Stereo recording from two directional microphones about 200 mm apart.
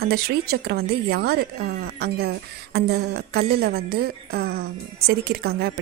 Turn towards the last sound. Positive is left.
turn(degrees=-50)  # may be behind; listen again after turning